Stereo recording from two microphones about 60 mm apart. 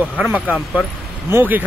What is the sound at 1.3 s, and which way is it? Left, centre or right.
Speech, right.